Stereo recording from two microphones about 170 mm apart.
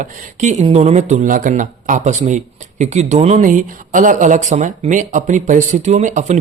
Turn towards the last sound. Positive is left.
turn(degrees=-45)  # may be behind; listen again after turning